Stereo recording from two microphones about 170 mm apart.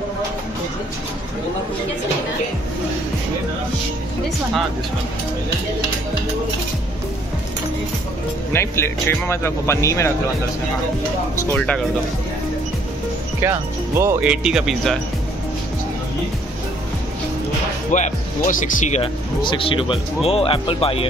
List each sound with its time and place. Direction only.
8.5 s speech: 15° left (ahead or behind)
11.5 s speech: 5° left (ahead or behind)
13.4 s speech: 15° right (ahead or behind)
17.9 s speech: 45° left (ahead or behind)
19.4 s speech: 30° left (ahead or behind)